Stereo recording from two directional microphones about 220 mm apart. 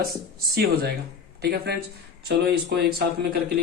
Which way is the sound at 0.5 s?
45° right (ahead or behind).